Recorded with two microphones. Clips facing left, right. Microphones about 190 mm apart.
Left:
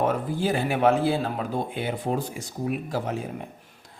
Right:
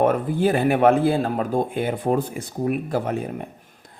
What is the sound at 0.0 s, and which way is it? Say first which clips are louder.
A man's voice: right 6 dB; 60° right (ahead or behind).